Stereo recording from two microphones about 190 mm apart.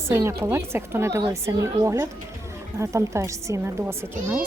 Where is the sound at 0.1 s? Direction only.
15° right (ahead or behind).